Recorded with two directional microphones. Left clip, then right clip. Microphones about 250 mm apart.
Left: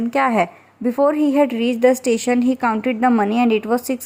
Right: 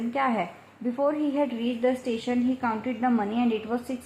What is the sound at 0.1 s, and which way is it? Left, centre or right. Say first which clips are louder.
Speech: left 9 dB; left.